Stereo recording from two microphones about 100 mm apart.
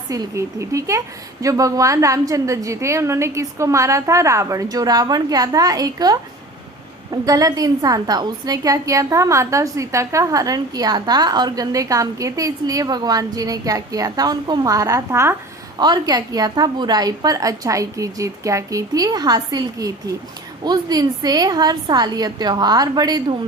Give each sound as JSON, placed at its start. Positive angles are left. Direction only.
{"t": 0.1, "sound": "a woman's voice", "side_deg": -30}
{"t": 15.8, "sound": "a woman's voice", "side_deg": -45}